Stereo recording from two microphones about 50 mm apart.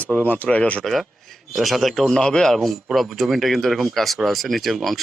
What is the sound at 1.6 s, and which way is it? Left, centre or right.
Speech, centre.